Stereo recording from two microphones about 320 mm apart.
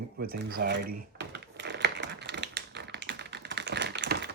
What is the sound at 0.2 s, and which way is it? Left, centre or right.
Typing, right.